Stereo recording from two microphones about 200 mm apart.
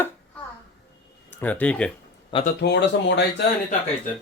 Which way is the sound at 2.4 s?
60° left (ahead or behind).